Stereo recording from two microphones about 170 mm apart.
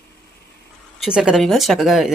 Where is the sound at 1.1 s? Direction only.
5° right (ahead or behind).